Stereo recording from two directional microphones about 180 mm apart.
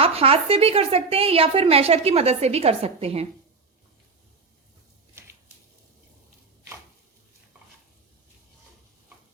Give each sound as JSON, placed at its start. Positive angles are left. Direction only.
{"t": 0.0, "sound": "a woman's voice", "side_deg": -35}